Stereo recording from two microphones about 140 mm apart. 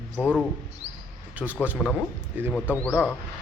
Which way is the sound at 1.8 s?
10° left (ahead or behind).